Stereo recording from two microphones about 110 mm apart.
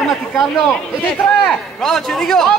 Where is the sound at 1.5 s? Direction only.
5° left (ahead or behind).